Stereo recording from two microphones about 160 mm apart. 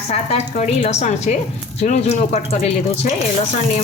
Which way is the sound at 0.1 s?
45° left (ahead or behind).